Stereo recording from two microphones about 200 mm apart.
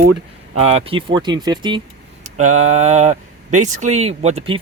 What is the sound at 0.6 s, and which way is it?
Speech, 30° right (ahead or behind).